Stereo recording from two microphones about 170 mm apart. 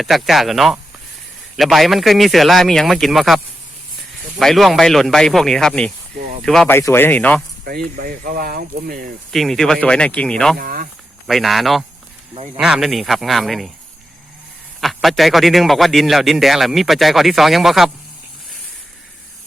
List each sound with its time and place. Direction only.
0.0 s a man's voice: centre (ahead or behind)
6.7 s speech: 15° left (ahead or behind)
7.6 s speech: 60° right (ahead or behind)
9.3 s a man's voice: centre (ahead or behind)
10.6 s speech: 55° right (ahead or behind)
11.3 s a man's voice: centre (ahead or behind)
14.8 s a man's voice: centre (ahead or behind)